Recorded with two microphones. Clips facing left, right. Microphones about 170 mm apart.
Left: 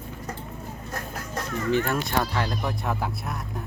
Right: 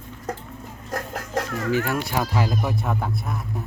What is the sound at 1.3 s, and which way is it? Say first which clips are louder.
Chicken: right 4 dB; 90° right.